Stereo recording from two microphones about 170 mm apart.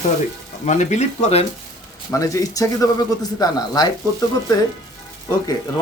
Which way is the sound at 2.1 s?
20° left (ahead or behind).